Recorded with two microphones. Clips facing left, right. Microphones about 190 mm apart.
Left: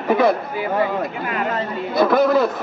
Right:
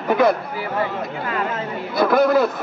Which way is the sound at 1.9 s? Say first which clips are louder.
Even; centre (ahead or behind).